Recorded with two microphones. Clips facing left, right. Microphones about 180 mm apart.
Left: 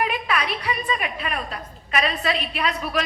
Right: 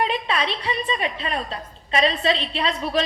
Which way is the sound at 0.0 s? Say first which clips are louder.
Right 1 dB; 30° right (ahead or behind).